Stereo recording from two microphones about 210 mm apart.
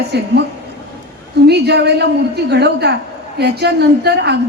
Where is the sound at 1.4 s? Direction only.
50° right (ahead or behind).